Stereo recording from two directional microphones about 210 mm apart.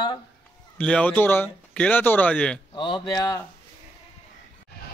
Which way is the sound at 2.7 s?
20° left (ahead or behind).